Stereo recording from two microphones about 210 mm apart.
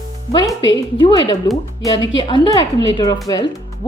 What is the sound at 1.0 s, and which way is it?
Speech, 25° left (ahead or behind).